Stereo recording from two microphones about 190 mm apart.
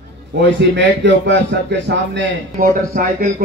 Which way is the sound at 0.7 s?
65° right (ahead or behind).